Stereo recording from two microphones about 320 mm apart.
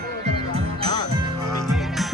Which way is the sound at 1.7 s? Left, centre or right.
Centre.